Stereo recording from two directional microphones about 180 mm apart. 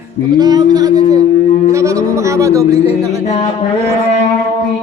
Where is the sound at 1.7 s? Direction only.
15° right (ahead or behind).